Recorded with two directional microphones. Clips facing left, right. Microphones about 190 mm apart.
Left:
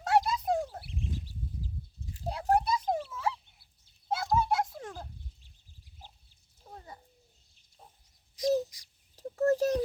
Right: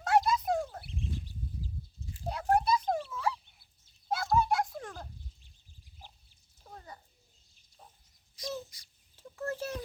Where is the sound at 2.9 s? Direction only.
25° left (ahead or behind).